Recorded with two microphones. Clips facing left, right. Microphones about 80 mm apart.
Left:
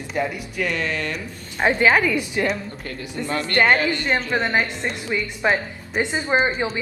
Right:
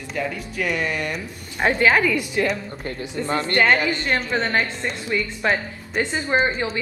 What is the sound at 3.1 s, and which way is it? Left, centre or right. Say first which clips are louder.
Speech: even; right.